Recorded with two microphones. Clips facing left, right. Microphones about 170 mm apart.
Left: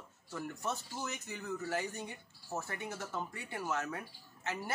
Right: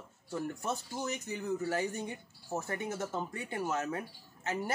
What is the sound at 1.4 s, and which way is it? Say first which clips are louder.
Speech: right 5 dB; 35° right (ahead or behind).